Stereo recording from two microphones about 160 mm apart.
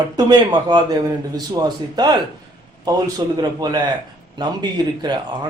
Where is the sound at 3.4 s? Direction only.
25° right (ahead or behind).